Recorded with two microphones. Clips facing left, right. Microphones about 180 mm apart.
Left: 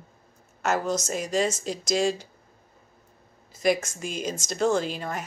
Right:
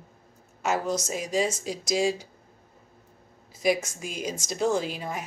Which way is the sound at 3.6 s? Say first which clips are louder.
Left 1 dB; 5° right (ahead or behind).